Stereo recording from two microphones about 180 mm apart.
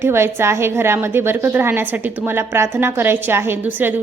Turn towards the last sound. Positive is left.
turn(degrees=-10)  # may be behind; listen again after turning